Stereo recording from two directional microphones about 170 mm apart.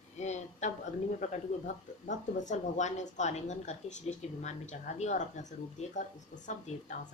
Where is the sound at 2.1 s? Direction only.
45° left (ahead or behind).